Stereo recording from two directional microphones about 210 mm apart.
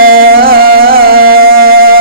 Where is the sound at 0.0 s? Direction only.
45° right (ahead or behind).